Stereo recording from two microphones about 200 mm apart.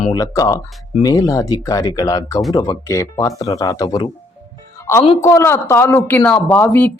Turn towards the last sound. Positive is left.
turn(degrees=10)  # may be behind; listen again after turning